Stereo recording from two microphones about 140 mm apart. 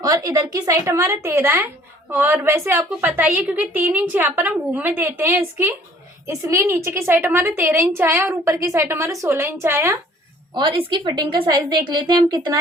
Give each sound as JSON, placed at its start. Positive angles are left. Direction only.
{"t": 0.0, "sound": "a woman's voice", "side_deg": -25}
{"t": 10.5, "sound": "a woman's voice", "side_deg": -35}